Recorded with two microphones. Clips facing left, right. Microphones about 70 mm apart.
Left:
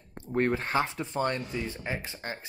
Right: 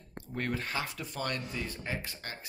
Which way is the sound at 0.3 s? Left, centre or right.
Left.